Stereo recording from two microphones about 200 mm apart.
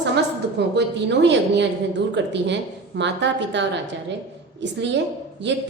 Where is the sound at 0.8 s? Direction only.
60° right (ahead or behind).